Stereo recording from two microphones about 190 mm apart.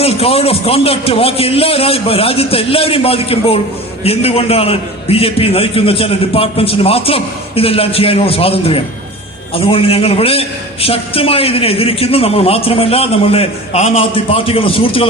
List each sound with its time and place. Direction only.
0.0 s a man's voice: 30° left (ahead or behind)